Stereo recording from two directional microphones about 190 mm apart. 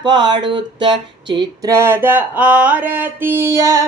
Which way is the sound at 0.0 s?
25° right (ahead or behind).